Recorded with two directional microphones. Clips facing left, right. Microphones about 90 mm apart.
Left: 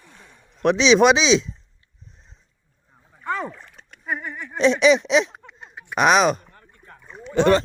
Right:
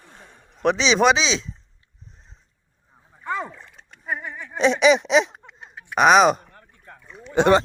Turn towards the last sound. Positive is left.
turn(degrees=-20)  # may be behind; listen again after turning